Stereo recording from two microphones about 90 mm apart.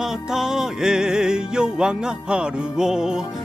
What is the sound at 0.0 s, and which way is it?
Music, 5° right (ahead or behind).